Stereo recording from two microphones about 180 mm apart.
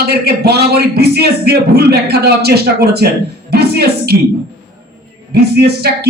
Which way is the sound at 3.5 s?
60° right (ahead or behind).